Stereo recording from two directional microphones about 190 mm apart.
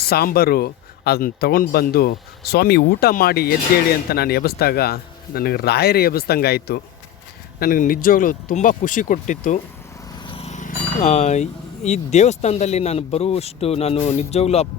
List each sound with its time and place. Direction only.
0.0 s speech: 55° left (ahead or behind)
10.2 s speech: 30° left (ahead or behind)